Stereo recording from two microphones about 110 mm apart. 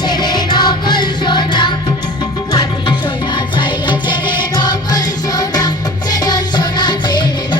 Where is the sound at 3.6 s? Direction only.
45° left (ahead or behind).